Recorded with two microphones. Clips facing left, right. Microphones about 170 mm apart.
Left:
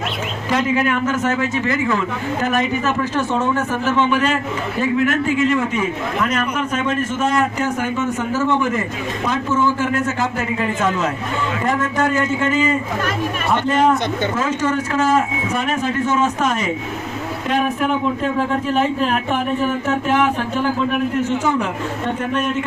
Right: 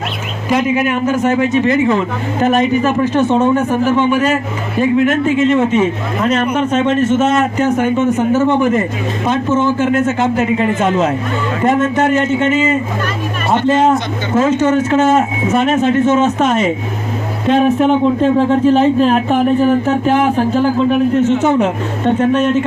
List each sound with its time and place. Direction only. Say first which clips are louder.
0.5 s a man's voice: right 4 dB; 15° right (ahead or behind)